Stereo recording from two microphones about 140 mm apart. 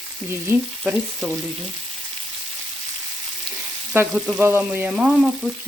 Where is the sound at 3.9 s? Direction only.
10° right (ahead or behind).